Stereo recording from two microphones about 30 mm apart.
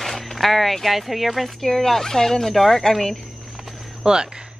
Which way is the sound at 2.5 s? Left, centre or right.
Centre.